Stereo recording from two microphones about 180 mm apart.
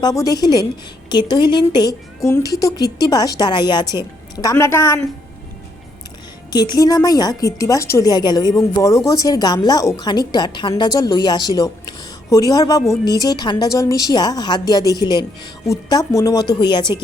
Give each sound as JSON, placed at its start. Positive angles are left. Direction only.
{"t": 0.0, "sound": "a woman's voice", "side_deg": 20}
{"t": 6.5, "sound": "a woman's voice", "side_deg": 25}